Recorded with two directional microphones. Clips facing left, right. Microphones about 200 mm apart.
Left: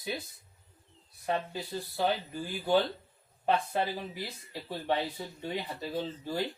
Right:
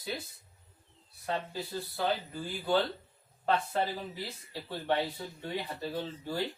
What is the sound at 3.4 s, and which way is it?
Speech, 15° left (ahead or behind).